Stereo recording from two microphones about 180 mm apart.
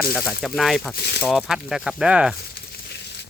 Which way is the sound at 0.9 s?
65° left (ahead or behind).